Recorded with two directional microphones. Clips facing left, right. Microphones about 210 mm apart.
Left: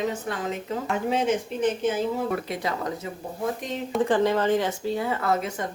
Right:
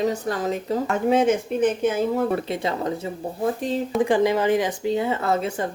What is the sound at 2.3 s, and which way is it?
Speech, 25° right (ahead or behind).